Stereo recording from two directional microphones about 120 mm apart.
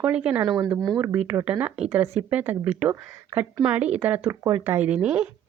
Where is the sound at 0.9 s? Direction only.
20° right (ahead or behind).